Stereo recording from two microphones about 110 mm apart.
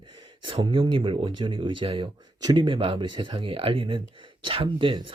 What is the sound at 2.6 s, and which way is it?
Speech, 50° right (ahead or behind).